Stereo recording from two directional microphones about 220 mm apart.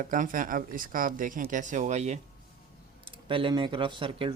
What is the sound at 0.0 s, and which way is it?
Speech, 35° right (ahead or behind).